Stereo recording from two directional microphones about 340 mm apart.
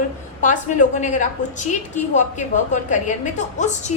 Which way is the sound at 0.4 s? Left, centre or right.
Left.